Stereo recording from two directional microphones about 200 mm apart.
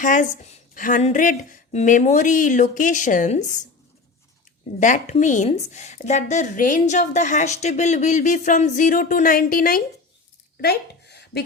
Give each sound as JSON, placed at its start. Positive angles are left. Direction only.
{"t": 0.0, "sound": "a woman's voice", "side_deg": 40}
{"t": 4.8, "sound": "a woman's voice", "side_deg": 35}
{"t": 10.6, "sound": "a sound", "side_deg": 55}